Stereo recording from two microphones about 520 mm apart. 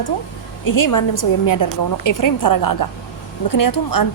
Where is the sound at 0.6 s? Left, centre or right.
Left.